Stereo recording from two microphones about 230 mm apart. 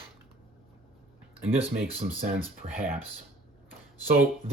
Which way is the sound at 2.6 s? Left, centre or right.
Right.